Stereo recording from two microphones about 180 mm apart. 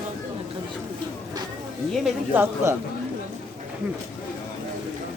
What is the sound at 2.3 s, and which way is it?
Speech, 10° right (ahead or behind).